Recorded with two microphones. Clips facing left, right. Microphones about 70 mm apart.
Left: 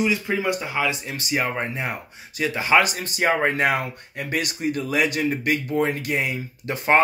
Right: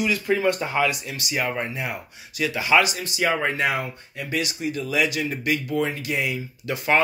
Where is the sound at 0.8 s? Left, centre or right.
Left.